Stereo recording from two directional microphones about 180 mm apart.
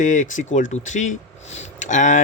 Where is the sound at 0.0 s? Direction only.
45° left (ahead or behind).